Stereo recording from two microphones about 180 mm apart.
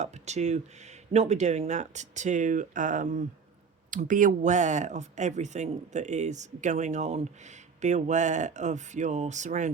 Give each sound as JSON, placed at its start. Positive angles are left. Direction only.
{"t": 0.0, "sound": "speech", "side_deg": -40}